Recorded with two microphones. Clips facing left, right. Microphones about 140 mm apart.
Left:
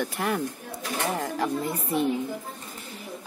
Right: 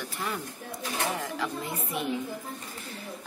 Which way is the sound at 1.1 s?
45° left (ahead or behind).